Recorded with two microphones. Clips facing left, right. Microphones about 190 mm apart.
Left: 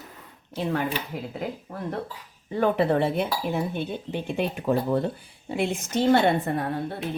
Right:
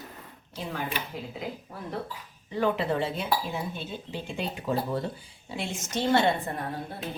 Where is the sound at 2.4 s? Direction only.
55° left (ahead or behind).